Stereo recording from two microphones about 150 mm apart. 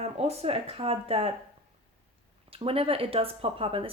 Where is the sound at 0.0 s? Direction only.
45° right (ahead or behind).